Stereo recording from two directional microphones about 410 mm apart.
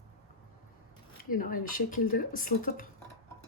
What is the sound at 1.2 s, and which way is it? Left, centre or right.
Speech, centre.